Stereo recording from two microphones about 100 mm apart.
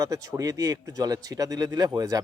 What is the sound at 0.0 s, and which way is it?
Speech, 35° right (ahead or behind).